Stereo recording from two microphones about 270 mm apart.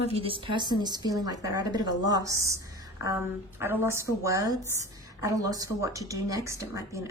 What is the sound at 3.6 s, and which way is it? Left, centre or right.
Speech, centre.